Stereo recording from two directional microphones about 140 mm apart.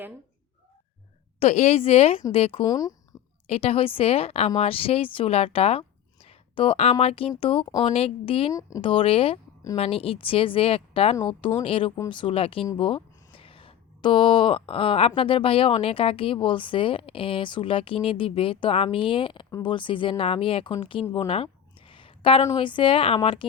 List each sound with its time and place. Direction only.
1.4 s speech: 50° left (ahead or behind)
2.6 s speech: 25° left (ahead or behind)
3.4 s speech: 45° left (ahead or behind)
6.2 s a sound: 45° left (ahead or behind)
7.0 s speech: 45° left (ahead or behind)
21.2 s a sound: 40° left (ahead or behind)
22.5 s speech: 35° left (ahead or behind)